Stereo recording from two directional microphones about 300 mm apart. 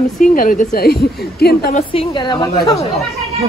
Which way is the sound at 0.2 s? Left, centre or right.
Left.